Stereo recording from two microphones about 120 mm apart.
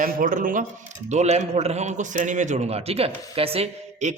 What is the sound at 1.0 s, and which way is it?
A man's voice, 70° right (ahead or behind).